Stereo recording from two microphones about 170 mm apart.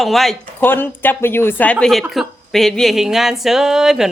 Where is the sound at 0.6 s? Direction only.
10° left (ahead or behind).